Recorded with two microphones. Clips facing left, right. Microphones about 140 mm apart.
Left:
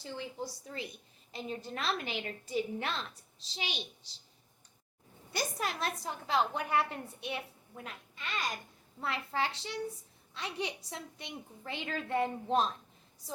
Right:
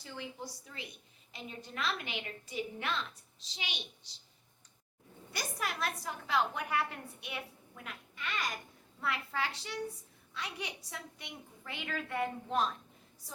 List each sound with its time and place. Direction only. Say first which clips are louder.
0.0 s a woman's voice: left 4 dB; 30° left (ahead or behind)
5.3 s a woman's voice: left 3 dB; 30° left (ahead or behind)